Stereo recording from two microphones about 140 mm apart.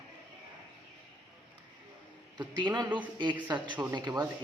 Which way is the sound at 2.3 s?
30° right (ahead or behind).